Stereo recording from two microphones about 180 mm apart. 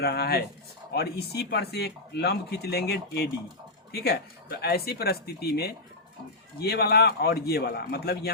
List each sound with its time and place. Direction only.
0.0 s speech: 60° left (ahead or behind)